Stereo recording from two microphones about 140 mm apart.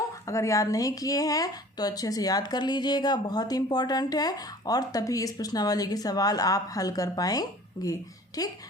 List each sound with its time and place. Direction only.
0.3 s speech: 20° left (ahead or behind)